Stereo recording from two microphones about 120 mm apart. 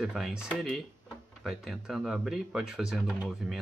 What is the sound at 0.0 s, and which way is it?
Speech, 5° right (ahead or behind).